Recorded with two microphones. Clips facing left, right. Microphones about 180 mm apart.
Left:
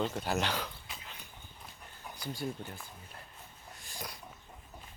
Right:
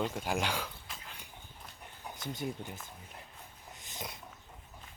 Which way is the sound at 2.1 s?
20° right (ahead or behind).